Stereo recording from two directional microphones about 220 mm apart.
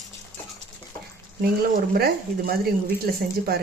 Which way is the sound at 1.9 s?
45° right (ahead or behind).